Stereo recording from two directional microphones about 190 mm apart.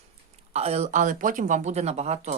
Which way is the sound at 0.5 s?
35° right (ahead or behind).